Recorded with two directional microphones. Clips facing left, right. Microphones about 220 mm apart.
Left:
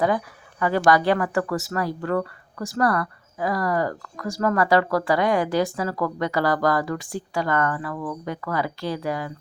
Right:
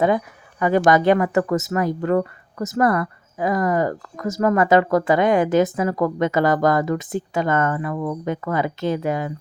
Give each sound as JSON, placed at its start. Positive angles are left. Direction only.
{"t": 0.6, "sound": "speech", "side_deg": -20}